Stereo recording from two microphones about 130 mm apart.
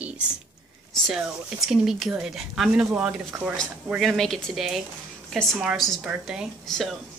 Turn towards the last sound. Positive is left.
turn(degrees=0)  # may be behind; listen again after turning